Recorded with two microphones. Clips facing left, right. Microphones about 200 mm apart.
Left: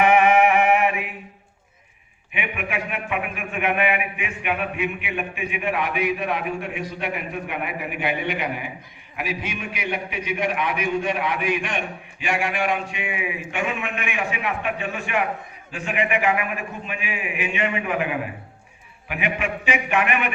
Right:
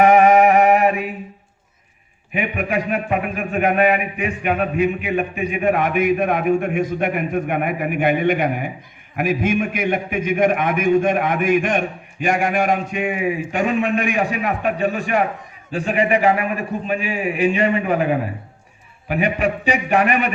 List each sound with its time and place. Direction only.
0.0 s music: 40° right (ahead or behind)
2.3 s a man's voice: 40° right (ahead or behind)